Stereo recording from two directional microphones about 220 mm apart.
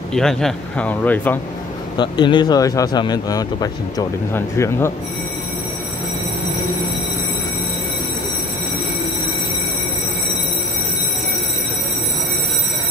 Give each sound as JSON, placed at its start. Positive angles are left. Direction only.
{"t": 0.1, "sound": "a man's voice", "side_deg": 0}
{"t": 2.0, "sound": "speech", "side_deg": 20}